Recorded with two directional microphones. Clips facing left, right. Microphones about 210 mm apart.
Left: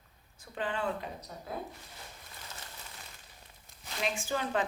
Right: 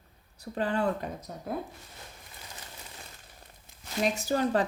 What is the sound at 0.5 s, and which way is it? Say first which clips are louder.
Speech: right 6 dB; 40° right (ahead or behind).